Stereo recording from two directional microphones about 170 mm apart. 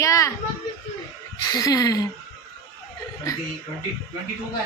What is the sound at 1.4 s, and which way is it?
Speech, 20° left (ahead or behind).